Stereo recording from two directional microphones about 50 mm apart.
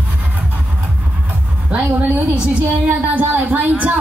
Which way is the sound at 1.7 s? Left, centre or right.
Right.